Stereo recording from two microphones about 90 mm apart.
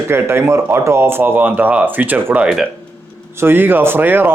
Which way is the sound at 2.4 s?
5° right (ahead or behind).